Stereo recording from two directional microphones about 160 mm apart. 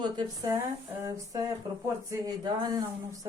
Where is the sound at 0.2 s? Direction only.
20° right (ahead or behind).